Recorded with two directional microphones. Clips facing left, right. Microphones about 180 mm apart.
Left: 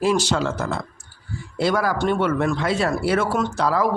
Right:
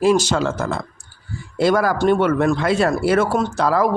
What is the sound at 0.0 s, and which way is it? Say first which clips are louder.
Speech: right 4 dB; 45° right (ahead or behind).